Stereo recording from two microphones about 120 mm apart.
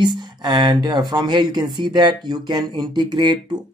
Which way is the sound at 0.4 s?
40° right (ahead or behind).